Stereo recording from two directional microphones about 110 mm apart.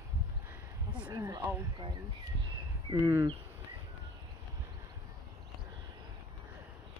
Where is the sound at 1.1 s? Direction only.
35° right (ahead or behind).